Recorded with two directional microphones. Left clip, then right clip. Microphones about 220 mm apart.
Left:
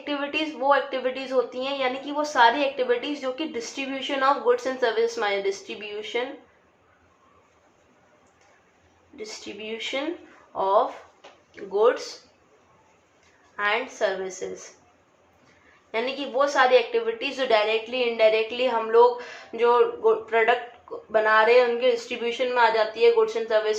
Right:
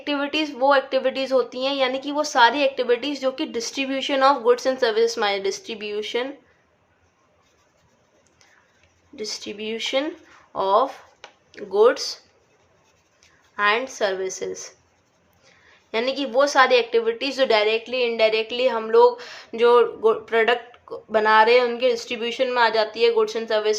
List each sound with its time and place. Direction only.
0.0 s speech: 50° right (ahead or behind)
9.1 s speech: 50° right (ahead or behind)
13.6 s speech: 50° right (ahead or behind)
15.9 s speech: 50° right (ahead or behind)